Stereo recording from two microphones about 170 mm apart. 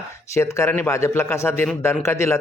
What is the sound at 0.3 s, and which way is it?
Speech, 15° left (ahead or behind).